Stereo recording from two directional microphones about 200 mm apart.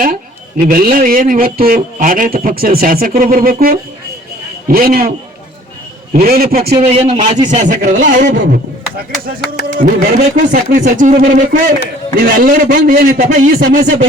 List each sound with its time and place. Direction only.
0.0 s speech: 45° right (ahead or behind)
6.1 s speech: 50° right (ahead or behind)
6.7 s speech: 30° right (ahead or behind)
7.6 s speech: 40° right (ahead or behind)
9.7 s speech: 45° right (ahead or behind)